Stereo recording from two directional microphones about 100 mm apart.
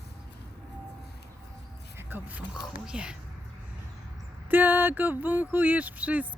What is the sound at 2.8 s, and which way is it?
Speech, 10° right (ahead or behind).